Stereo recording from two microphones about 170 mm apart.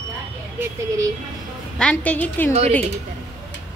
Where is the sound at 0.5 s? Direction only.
20° right (ahead or behind).